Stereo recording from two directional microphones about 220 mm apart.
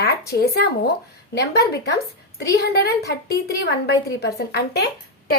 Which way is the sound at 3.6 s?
50° left (ahead or behind).